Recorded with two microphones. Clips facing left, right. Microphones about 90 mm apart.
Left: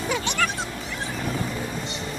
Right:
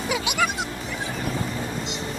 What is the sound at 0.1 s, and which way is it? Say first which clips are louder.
Music: right 1 dB; 10° right (ahead or behind).